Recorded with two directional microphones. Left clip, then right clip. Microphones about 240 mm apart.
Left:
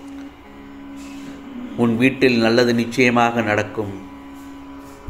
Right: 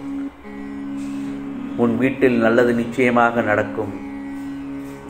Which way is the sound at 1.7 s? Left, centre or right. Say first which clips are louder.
Left 1 dB; left.